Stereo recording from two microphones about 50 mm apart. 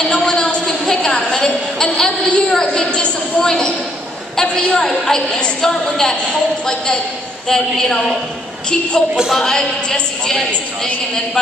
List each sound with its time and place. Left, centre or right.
0.1 s a sound: centre
4.8 s a woman's voice: centre
7.4 s a woman's voice: centre
9.3 s a woman's voice: centre
9.8 s a woman's voice: centre